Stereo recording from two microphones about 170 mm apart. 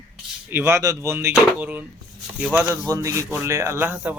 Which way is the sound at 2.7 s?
20° right (ahead or behind).